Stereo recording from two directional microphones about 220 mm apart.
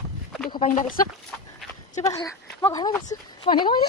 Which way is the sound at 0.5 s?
20° left (ahead or behind).